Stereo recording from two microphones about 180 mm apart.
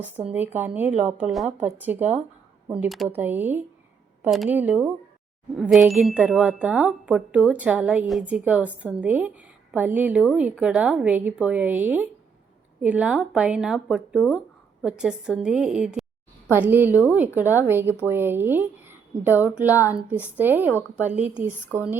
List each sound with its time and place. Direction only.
0.0 s speech: 35° right (ahead or behind)
0.3 s speech: 10° right (ahead or behind)
16.9 s speech: 15° left (ahead or behind)
17.2 s speech: 10° right (ahead or behind)